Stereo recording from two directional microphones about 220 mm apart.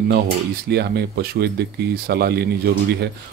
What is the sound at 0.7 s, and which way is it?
Speech, 45° right (ahead or behind).